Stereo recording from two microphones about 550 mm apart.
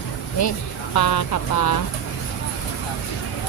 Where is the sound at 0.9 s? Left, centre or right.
Left.